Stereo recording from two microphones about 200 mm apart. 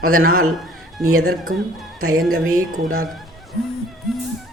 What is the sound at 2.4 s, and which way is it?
Music, 90° right.